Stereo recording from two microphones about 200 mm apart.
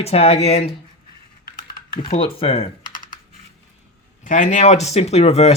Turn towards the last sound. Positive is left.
turn(degrees=30)  # may be behind; listen again after turning